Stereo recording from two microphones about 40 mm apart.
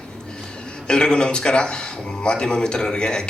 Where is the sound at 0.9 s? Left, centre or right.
Left.